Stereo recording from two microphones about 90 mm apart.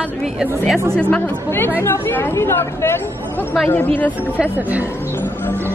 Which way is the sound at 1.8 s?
25° left (ahead or behind).